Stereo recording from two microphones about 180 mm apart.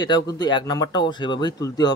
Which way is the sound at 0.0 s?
25° left (ahead or behind).